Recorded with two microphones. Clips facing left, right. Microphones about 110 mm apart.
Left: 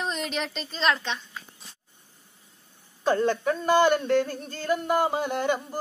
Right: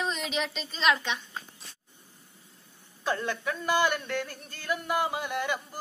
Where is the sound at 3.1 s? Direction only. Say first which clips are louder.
Left 7 dB; 35° left (ahead or behind).